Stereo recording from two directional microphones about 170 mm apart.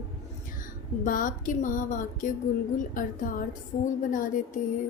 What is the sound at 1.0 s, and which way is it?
A woman's voice, 50° left (ahead or behind).